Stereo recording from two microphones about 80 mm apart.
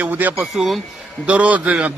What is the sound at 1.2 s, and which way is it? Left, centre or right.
Speech, centre.